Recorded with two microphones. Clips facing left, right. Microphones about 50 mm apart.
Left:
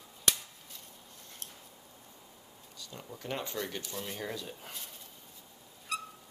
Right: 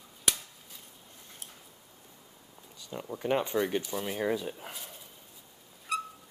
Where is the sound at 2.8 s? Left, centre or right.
Right.